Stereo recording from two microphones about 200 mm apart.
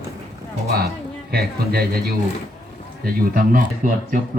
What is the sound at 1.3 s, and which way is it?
A man's voice, 50° right (ahead or behind).